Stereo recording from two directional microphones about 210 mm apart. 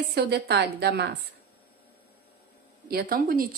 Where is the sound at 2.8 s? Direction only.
45° right (ahead or behind).